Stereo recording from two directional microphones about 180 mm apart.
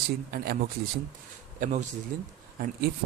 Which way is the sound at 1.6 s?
40° right (ahead or behind).